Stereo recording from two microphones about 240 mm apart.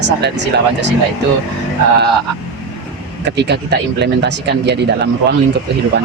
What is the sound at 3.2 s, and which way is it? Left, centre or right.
Speech, right.